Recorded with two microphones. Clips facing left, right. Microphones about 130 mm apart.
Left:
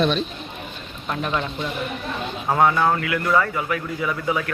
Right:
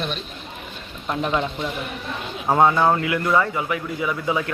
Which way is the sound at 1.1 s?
20° right (ahead or behind).